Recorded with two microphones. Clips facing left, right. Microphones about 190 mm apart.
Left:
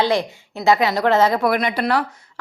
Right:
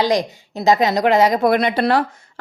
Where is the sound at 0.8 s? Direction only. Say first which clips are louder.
Right 2 dB; 15° right (ahead or behind).